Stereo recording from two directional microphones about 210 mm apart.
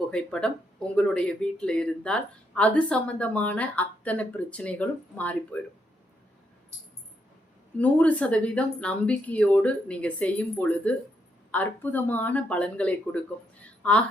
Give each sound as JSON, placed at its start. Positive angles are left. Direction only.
{"t": 0.1, "sound": "speech", "side_deg": 5}
{"t": 7.8, "sound": "speech", "side_deg": 5}
{"t": 13.7, "sound": "a sound", "side_deg": 5}